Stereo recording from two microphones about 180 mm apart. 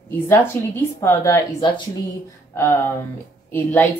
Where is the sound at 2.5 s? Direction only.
15° left (ahead or behind).